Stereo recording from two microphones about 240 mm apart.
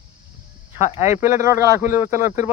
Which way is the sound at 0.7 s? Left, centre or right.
Left.